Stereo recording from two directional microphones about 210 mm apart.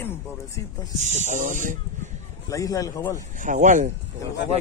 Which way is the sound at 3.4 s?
35° right (ahead or behind).